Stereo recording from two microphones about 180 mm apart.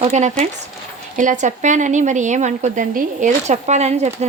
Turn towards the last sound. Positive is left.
turn(degrees=-35)  # may be behind; listen again after turning